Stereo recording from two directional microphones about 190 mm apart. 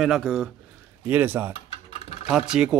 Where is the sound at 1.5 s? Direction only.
30° left (ahead or behind).